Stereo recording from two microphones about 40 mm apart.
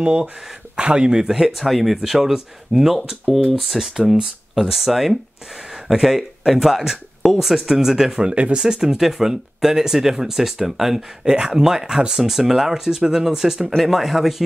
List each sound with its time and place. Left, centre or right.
0.0 s speech: right
1.2 s speech: centre
8.3 s speech: right
8.5 s speech: centre
11.0 s speech: centre